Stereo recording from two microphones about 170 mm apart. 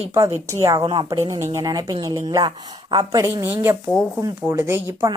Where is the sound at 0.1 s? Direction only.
20° right (ahead or behind).